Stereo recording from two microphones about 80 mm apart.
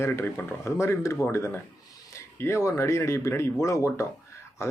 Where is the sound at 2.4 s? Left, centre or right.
Left.